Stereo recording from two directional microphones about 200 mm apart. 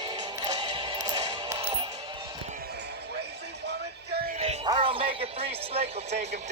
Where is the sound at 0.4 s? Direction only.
25° right (ahead or behind).